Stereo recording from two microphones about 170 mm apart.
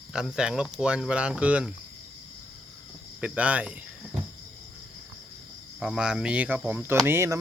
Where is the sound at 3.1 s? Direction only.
5° right (ahead or behind).